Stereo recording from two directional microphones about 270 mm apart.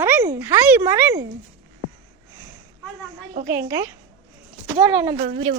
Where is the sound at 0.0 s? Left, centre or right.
Centre.